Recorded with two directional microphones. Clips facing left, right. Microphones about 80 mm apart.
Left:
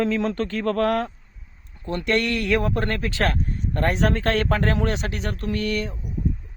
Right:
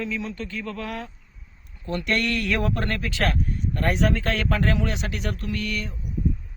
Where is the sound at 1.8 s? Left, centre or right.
Left.